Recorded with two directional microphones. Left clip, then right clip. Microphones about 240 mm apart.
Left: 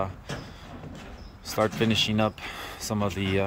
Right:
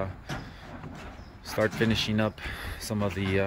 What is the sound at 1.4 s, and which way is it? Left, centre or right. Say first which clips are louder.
Speech: left 1 dB; centre.